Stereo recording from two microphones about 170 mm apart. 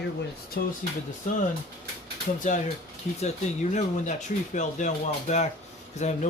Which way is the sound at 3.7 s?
45° left (ahead or behind).